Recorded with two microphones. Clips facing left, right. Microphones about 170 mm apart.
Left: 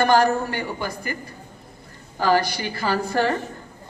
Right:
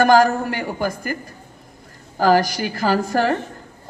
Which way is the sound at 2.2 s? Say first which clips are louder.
Right 4 dB; 45° right (ahead or behind).